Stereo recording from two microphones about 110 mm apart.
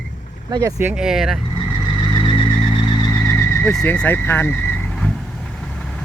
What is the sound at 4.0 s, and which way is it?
Speech, 15° left (ahead or behind).